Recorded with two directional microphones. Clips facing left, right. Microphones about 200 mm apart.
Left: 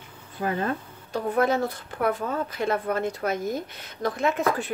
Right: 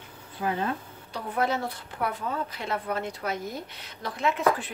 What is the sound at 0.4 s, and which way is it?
Speech, 50° left (ahead or behind).